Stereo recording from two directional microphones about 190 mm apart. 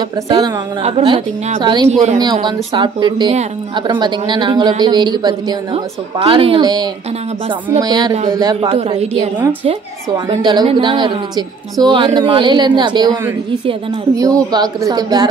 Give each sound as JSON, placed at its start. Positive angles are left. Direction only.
{"t": 0.3, "sound": "a woman's voice", "side_deg": -30}
{"t": 9.7, "sound": "a woman's voice", "side_deg": -25}